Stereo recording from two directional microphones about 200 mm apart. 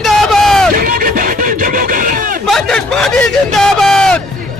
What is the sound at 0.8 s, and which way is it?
Music, 45° right (ahead or behind).